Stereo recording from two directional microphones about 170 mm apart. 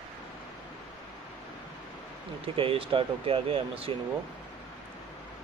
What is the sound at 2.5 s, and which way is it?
Speech, 30° right (ahead or behind).